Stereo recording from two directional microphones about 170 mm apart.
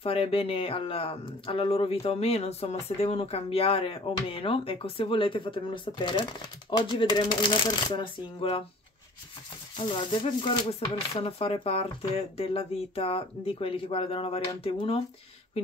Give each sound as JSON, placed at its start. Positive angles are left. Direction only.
{"t": 0.0, "sound": "speech", "side_deg": 35}
{"t": 9.8, "sound": "speech", "side_deg": 30}